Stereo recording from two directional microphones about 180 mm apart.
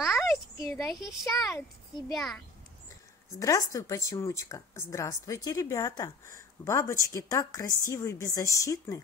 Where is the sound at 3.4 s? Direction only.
20° left (ahead or behind).